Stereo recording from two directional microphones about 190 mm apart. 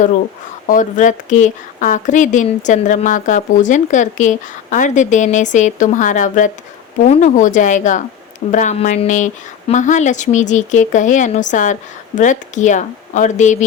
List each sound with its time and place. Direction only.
0.7 s speech: 40° left (ahead or behind)